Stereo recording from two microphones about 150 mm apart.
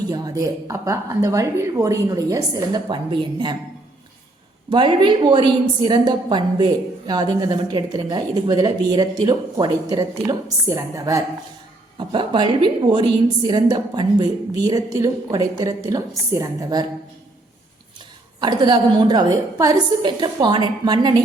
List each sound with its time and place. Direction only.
0.1 s a woman's voice: 25° right (ahead or behind)
4.7 s a woman's voice: 30° right (ahead or behind)
11.9 s a woman's voice: 30° right (ahead or behind)
18.3 s a woman's voice: 30° right (ahead or behind)